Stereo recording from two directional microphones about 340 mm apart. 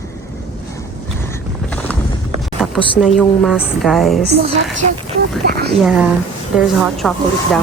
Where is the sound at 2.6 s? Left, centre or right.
Centre.